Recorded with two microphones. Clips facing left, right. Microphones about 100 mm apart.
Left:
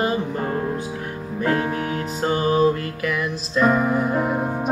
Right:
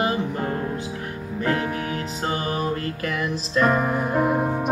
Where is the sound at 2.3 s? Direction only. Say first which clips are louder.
Left 8 dB; 25° left (ahead or behind).